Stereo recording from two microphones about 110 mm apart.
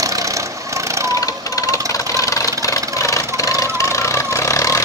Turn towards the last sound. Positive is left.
turn(degrees=30)  # may be behind; listen again after turning